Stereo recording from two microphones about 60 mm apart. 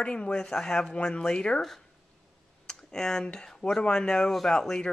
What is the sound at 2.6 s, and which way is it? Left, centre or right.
A man's voice, centre.